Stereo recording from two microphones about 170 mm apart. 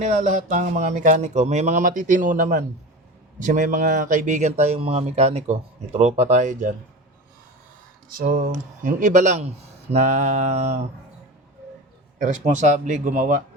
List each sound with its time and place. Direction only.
0.0 s speech: 50° right (ahead or behind)
8.1 s speech: 60° right (ahead or behind); by 10.8 s 40° right (ahead or behind)
12.2 s speech: 45° right (ahead or behind)